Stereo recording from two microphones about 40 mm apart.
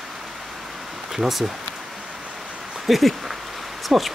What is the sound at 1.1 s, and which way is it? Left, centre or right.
Speech, centre.